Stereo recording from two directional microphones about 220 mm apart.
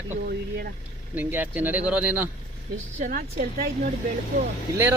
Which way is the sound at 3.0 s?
40° right (ahead or behind).